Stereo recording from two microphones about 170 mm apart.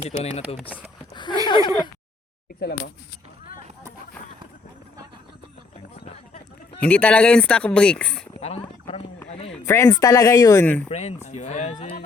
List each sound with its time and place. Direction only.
0.2 s speech: 35° left (ahead or behind)
1.1 s chuckle: 25° left (ahead or behind)
1.5 s a sound: 25° left (ahead or behind)
2.6 s speech: 75° left (ahead or behind)
6.7 s speech: 10° left (ahead or behind)
8.4 s a sound: 35° left (ahead or behind)
9.6 s speech: 15° left (ahead or behind)
10.8 s speech: 40° left (ahead or behind)